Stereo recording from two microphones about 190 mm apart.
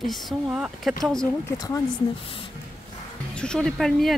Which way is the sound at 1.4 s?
20° left (ahead or behind).